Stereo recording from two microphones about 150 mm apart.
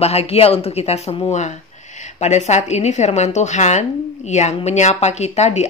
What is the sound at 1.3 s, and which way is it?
Speech, 50° left (ahead or behind).